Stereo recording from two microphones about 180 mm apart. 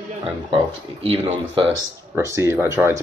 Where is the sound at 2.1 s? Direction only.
15° right (ahead or behind).